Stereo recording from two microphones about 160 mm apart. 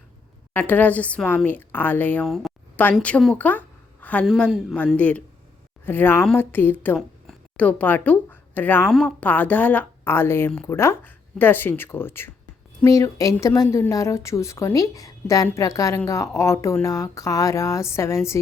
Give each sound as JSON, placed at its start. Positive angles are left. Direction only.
{"t": 0.5, "sound": "speech", "side_deg": 10}
{"t": 2.2, "sound": "a man's voice", "side_deg": 0}